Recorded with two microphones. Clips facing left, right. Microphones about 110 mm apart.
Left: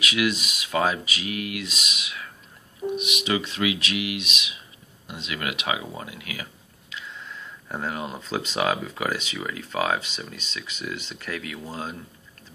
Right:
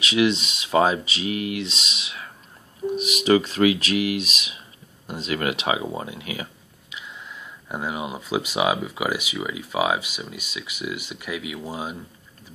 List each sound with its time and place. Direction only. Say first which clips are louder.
0.0 s speech: right 4 dB; 30° right (ahead or behind)
7.0 s speech: even; 15° right (ahead or behind)